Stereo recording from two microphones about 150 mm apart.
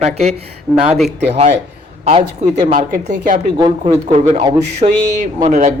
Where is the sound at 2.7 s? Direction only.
60° right (ahead or behind).